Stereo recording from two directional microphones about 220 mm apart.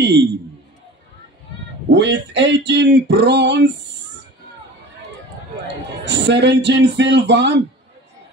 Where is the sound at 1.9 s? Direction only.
55° right (ahead or behind).